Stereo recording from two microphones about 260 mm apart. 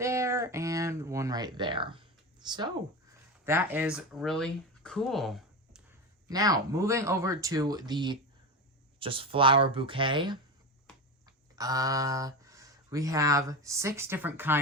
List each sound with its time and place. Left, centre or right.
0.0 s a sound: centre
2.4 s speech: centre
6.2 s speech: centre
11.5 s speech: centre